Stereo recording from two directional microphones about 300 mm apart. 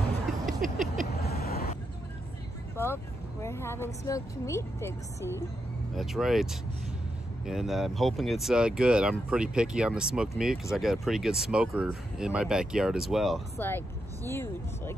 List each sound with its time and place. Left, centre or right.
0.5 s a sound: right
1.1 s vehicle: left
2.7 s speech: centre